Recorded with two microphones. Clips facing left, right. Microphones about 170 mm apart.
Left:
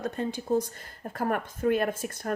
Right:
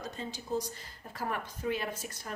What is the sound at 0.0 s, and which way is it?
Speech, 55° left (ahead or behind).